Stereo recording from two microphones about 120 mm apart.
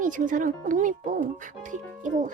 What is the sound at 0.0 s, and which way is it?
Speech, 90° right.